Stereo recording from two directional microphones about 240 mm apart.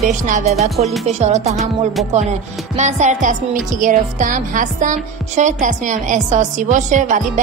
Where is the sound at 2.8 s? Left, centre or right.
Right.